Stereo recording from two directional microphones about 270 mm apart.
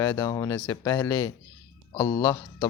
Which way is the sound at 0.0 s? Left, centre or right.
Centre.